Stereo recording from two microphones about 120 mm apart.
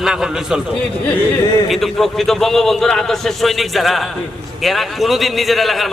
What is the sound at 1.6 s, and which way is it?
A man's voice, centre (ahead or behind).